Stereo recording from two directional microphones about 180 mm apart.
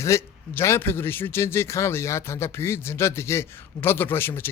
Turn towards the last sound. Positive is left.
turn(degrees=10)  # may be behind; listen again after turning